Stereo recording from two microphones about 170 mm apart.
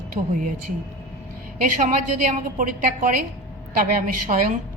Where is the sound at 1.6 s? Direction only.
50° right (ahead or behind).